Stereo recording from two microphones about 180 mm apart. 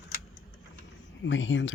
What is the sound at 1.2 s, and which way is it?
Speech, 90° left.